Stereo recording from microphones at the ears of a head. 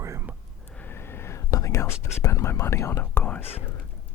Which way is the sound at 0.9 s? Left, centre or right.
Left.